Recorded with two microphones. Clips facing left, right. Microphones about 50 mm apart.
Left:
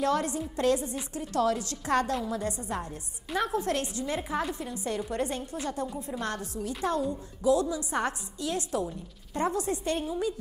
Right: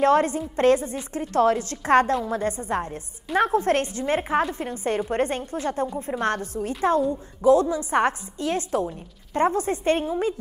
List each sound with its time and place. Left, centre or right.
0.0 s a woman's voice: right